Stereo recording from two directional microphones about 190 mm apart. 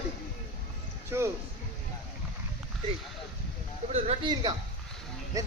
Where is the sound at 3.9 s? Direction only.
35° right (ahead or behind).